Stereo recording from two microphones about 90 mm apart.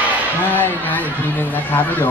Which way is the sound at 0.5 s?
20° left (ahead or behind).